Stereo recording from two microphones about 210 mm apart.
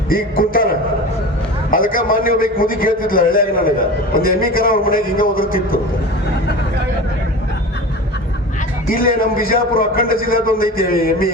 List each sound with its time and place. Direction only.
0.1 s a man's voice: 45° left (ahead or behind)
8.9 s a man's voice: 45° left (ahead or behind)